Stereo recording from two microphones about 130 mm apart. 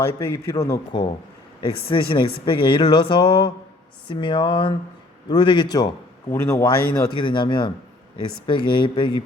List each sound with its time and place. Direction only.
0.0 s speech: 20° left (ahead or behind)
1.6 s speech: 45° left (ahead or behind)
6.3 s speech: 20° left (ahead or behind)
7.2 s speech: 40° left (ahead or behind)